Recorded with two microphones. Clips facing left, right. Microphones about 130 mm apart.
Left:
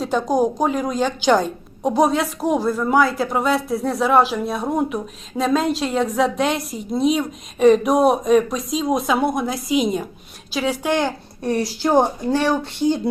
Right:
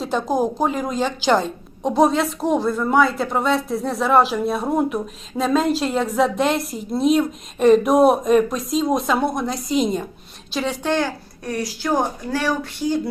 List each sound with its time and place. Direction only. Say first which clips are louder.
0.0 s a woman's voice: left 2 dB; centre (ahead or behind)
10.9 s speech: left 1 dB; 25° left (ahead or behind)